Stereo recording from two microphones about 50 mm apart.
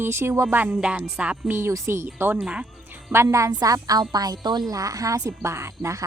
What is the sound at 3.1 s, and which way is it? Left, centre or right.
Speech, right.